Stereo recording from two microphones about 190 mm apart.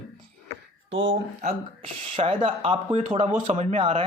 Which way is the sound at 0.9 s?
75° right (ahead or behind).